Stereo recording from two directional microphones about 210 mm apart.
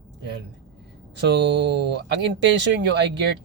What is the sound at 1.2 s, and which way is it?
Speech, 60° right (ahead or behind).